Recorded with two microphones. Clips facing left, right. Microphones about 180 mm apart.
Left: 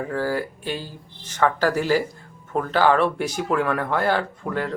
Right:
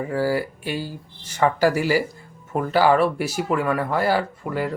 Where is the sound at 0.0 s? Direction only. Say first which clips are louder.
Right 2 dB; 10° right (ahead or behind).